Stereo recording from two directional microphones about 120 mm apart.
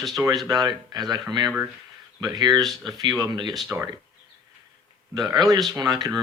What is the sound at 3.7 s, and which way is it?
Speech, 20° right (ahead or behind).